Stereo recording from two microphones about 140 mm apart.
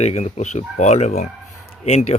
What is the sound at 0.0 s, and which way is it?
Speech, 50° left (ahead or behind).